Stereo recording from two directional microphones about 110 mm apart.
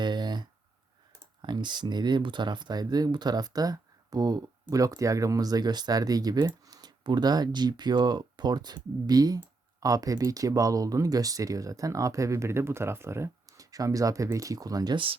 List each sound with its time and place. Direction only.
0.0 s a sound: 45° right (ahead or behind)
1.4 s speech: 40° right (ahead or behind)
14.9 s speech: 55° right (ahead or behind)